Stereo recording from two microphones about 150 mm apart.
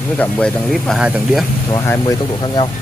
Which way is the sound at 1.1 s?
10° right (ahead or behind).